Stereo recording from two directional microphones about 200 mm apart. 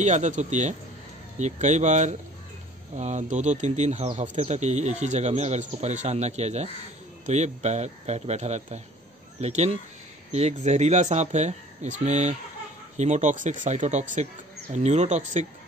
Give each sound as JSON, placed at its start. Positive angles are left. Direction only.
{"t": 0.0, "sound": "speech", "side_deg": -35}